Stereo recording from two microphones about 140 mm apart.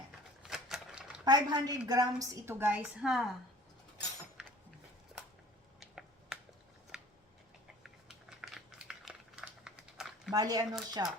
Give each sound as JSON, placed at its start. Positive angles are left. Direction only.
{"t": 0.4, "sound": "typewriter", "side_deg": 0}
{"t": 1.2, "sound": "a woman's voice", "side_deg": -30}
{"t": 5.8, "sound": "finger snapping", "side_deg": 0}
{"t": 6.9, "sound": "a sound", "side_deg": -5}
{"t": 10.3, "sound": "speech", "side_deg": -25}